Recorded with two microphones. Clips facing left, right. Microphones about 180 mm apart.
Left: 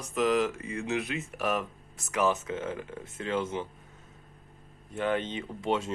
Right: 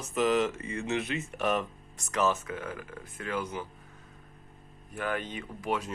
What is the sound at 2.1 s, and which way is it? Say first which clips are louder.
Speech: left 1 dB; 15° left (ahead or behind).